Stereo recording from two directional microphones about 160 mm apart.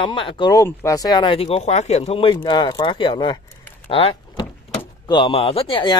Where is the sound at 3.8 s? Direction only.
35° left (ahead or behind).